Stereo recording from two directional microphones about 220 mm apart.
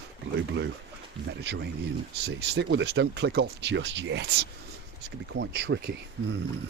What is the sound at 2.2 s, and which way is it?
Speech, 50° right (ahead or behind).